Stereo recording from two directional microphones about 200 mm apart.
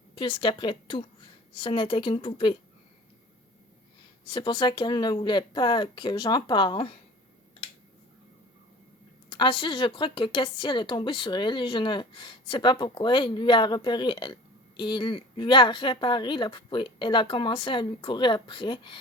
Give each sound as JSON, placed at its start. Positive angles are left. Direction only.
{"t": 0.2, "sound": "speech", "side_deg": 25}
{"t": 4.3, "sound": "speech", "side_deg": 20}
{"t": 9.3, "sound": "speech", "side_deg": 25}